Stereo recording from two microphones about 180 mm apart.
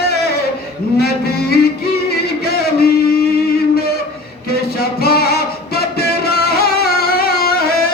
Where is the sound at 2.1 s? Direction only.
60° left (ahead or behind).